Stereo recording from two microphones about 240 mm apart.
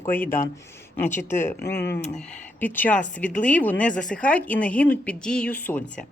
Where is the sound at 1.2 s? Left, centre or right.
Centre.